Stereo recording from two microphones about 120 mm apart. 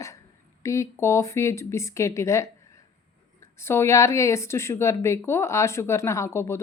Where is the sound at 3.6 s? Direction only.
20° left (ahead or behind).